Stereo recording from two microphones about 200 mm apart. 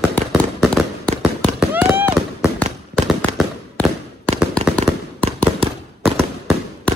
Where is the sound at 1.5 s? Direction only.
10° right (ahead or behind).